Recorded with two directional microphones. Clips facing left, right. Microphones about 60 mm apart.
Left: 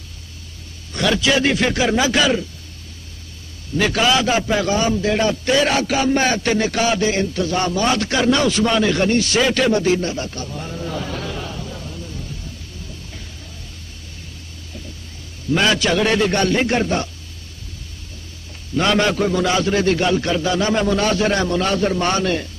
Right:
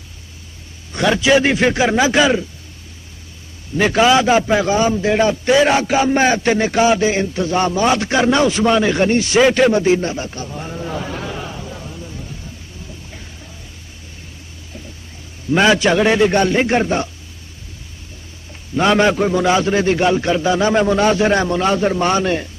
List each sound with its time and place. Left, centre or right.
0.9 s a man's voice: right
3.7 s a man's voice: right
15.5 s a man's voice: right
18.8 s a man's voice: centre